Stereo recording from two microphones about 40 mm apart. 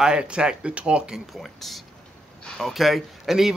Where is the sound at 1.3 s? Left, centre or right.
Centre.